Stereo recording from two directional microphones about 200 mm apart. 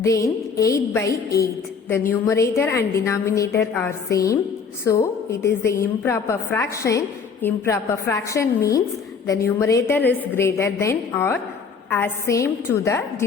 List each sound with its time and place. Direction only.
0.0 s a woman's voice: 15° left (ahead or behind)
5.6 s a woman's voice: 15° left (ahead or behind)